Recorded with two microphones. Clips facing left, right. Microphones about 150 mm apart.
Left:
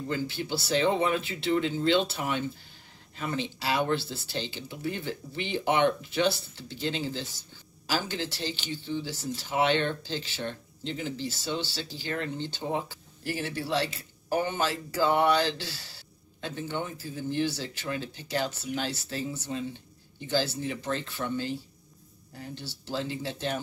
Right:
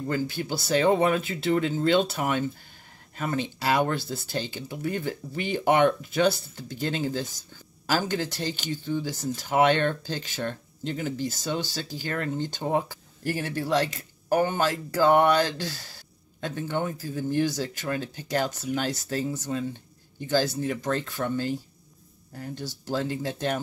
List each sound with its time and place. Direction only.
0.1 s speech: 45° right (ahead or behind)
20.2 s speech: 45° right (ahead or behind)